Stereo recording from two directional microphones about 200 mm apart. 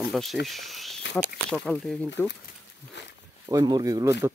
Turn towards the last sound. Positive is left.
turn(degrees=-15)  # may be behind; listen again after turning